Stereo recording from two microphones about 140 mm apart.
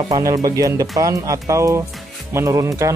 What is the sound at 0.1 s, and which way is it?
Speech, 25° right (ahead or behind).